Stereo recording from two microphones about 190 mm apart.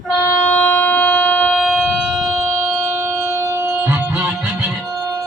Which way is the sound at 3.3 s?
15° right (ahead or behind).